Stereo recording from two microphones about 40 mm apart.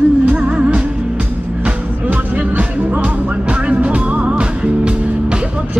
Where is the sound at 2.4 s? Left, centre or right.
Right.